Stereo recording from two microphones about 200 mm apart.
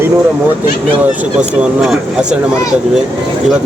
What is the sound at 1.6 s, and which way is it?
Speech, 5° right (ahead or behind).